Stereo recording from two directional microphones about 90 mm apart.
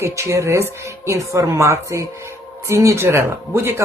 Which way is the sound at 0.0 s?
35° right (ahead or behind).